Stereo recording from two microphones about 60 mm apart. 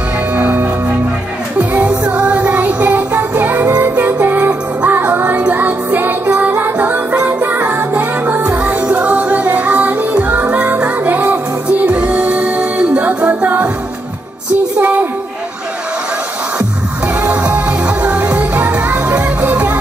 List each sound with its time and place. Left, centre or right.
0.4 s music: right
14.8 s a sound: right
17.2 s music: right